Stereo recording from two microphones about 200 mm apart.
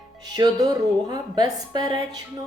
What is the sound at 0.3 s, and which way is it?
Speech, 20° right (ahead or behind).